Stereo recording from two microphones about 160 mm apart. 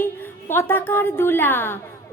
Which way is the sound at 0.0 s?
15° left (ahead or behind).